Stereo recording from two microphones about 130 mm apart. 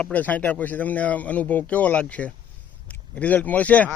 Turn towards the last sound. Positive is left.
turn(degrees=10)  # may be behind; listen again after turning